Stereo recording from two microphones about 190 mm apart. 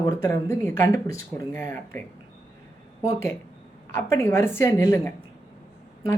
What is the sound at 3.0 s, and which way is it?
A woman's voice, 15° left (ahead or behind).